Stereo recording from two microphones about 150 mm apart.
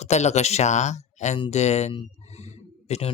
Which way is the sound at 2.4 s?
45° left (ahead or behind).